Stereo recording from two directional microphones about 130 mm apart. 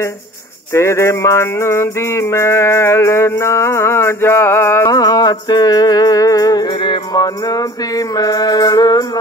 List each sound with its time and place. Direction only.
0.7 s music: 20° left (ahead or behind)